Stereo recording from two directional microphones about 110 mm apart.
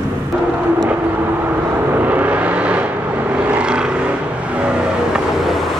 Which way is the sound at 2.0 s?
15° right (ahead or behind).